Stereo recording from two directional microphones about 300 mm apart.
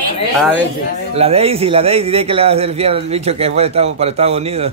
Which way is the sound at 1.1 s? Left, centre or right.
Centre.